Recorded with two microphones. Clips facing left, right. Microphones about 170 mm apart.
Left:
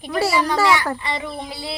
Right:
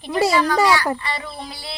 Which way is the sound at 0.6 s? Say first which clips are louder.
Even; 20° left (ahead or behind).